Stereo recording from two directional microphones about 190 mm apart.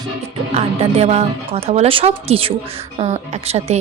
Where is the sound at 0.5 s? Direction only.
35° right (ahead or behind).